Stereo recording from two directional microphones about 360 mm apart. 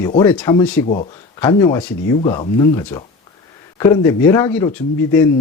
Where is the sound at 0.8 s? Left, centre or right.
Centre.